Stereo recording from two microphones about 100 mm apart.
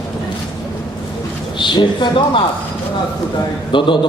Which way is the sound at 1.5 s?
50° left (ahead or behind).